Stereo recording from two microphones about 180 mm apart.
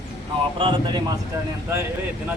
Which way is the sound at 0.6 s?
25° right (ahead or behind).